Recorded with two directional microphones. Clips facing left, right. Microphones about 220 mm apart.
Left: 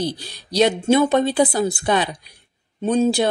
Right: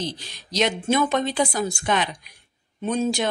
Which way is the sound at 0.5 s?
35° left (ahead or behind).